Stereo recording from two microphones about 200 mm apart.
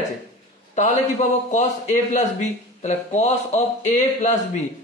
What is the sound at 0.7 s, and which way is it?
A man's voice, 35° left (ahead or behind).